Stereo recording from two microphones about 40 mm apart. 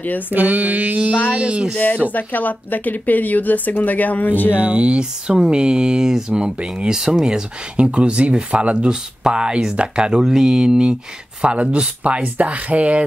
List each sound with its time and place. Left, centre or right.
0.3 s mantra: right
1.3 s speech: right
2.1 s a woman's voice: left
4.6 s speech: right; by 7.4 s centre
7.7 s speech: right
12.2 s mantra: right